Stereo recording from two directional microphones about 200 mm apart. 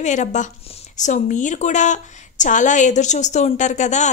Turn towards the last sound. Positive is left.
turn(degrees=35)  # may be behind; listen again after turning